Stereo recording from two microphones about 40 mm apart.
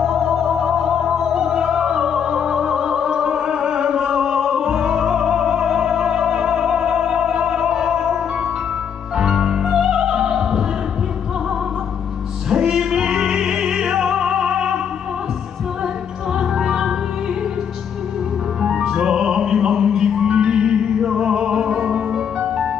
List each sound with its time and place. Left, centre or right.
0.0 s opera: centre
9.1 s music: centre
12.4 s music: centre
16.3 s music: centre
18.6 s music: centre